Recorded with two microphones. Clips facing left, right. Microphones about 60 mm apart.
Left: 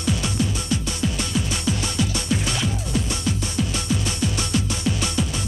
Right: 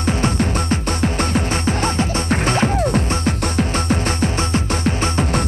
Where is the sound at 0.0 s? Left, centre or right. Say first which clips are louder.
Right 5 dB; right.